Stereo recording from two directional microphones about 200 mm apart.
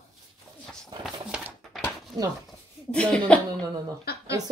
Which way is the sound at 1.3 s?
5° right (ahead or behind).